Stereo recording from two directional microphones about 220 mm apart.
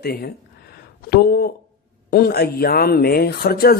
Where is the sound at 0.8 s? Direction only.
45° left (ahead or behind).